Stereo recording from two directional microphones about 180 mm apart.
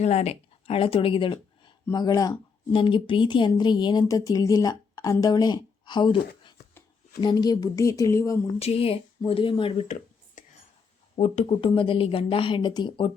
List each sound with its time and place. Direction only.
0.0 s speech: 40° left (ahead or behind); by 8.4 s 15° left (ahead or behind)
8.5 s speech: 35° left (ahead or behind)